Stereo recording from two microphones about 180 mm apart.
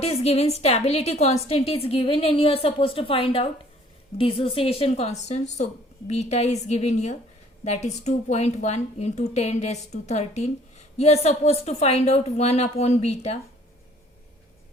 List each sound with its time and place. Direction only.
0.0 s a woman's voice: 35° left (ahead or behind)